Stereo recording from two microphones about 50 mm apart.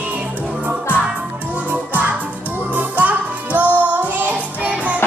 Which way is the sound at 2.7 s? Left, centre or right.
Right.